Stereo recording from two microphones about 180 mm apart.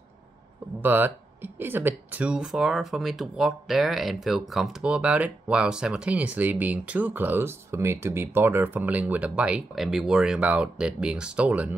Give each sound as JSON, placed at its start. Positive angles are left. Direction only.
{"t": 0.7, "sound": "speech", "side_deg": -10}